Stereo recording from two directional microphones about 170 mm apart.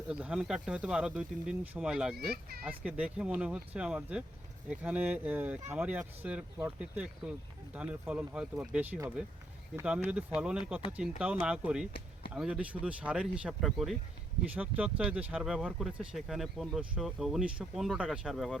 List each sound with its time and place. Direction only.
0.1 s speech: 5° right (ahead or behind)
2.1 s a child's voice: 65° right (ahead or behind)
2.6 s speech: 5° right (ahead or behind)